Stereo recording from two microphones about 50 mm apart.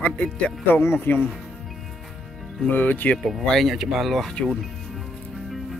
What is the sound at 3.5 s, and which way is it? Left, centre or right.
Speech, centre.